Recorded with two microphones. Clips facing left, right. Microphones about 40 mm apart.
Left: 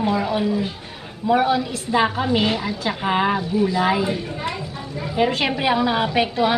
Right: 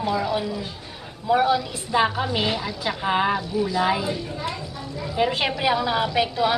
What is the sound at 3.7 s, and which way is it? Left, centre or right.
Speech, centre.